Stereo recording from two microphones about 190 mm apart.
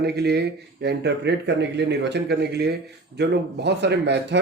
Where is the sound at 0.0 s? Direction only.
60° right (ahead or behind).